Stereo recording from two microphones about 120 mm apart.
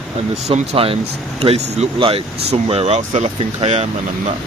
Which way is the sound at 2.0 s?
50° right (ahead or behind).